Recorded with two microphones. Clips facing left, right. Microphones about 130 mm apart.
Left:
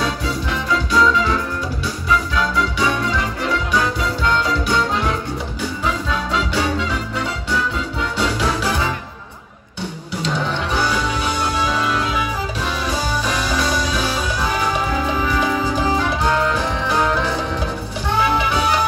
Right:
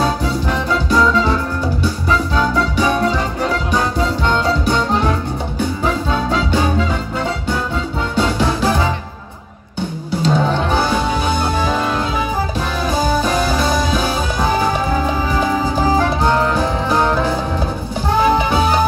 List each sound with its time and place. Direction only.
6.0 s music: 40° right (ahead or behind)
10.2 s music: 40° right (ahead or behind)
13.1 s music: 45° right (ahead or behind)
13.7 s music: 35° right (ahead or behind)
18.2 s music: 35° right (ahead or behind)